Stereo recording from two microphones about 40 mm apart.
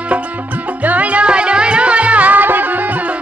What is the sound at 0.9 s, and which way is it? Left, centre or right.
Music, right.